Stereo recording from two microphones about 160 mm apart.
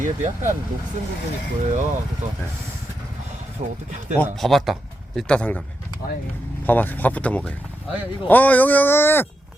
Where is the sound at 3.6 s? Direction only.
45° right (ahead or behind).